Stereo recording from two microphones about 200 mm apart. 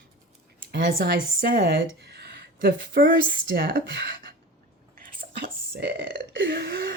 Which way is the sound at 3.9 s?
65° right (ahead or behind).